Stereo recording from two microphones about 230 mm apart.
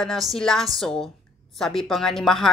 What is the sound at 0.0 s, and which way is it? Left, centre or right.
A woman's voice, centre.